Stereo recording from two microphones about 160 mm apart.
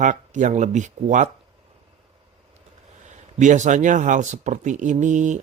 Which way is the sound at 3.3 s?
50° right (ahead or behind).